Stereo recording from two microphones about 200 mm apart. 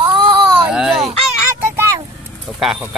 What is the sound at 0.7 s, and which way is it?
Speech, centre (ahead or behind).